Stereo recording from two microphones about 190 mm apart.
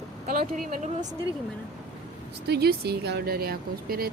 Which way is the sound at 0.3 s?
45° right (ahead or behind).